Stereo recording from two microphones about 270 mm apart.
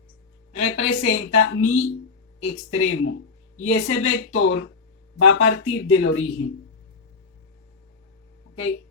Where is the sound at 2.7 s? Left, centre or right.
Left.